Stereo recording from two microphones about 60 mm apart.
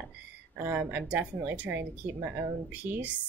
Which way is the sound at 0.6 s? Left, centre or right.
Right.